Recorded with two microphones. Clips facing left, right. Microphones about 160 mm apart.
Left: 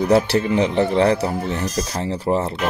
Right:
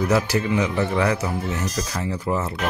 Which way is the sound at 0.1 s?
30° left (ahead or behind).